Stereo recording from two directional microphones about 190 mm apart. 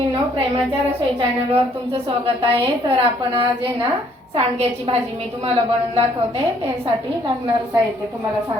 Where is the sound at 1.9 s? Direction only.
30° right (ahead or behind).